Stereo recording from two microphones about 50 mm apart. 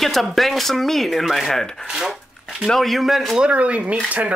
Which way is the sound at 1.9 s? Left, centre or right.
Centre.